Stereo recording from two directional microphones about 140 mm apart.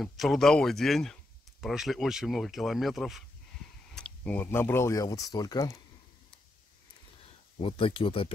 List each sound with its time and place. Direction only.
0.0 s speech: centre (ahead or behind); by 5.8 s 25° left (ahead or behind)
7.6 s speech: 40° left (ahead or behind)